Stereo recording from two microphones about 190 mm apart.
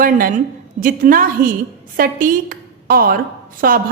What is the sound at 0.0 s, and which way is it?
A woman's voice, 45° right (ahead or behind).